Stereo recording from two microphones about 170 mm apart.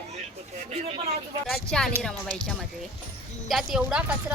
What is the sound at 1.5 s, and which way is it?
Speech, 5° left (ahead or behind).